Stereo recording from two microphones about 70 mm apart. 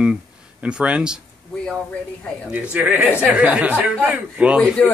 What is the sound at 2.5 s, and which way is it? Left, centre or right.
Speech, right.